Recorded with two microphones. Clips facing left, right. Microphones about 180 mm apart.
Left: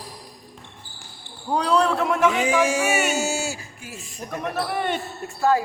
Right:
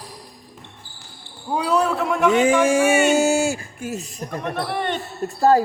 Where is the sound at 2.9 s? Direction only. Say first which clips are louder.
Right 6 dB; 5° left (ahead or behind).